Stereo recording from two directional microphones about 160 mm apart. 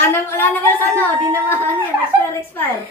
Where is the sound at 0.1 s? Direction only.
15° left (ahead or behind).